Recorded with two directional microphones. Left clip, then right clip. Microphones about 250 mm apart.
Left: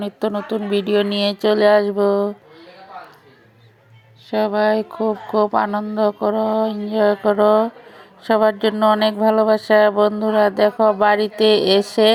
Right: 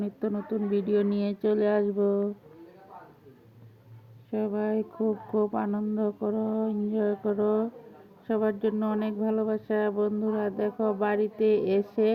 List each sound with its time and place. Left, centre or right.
0.0 s speech: left
4.3 s speech: left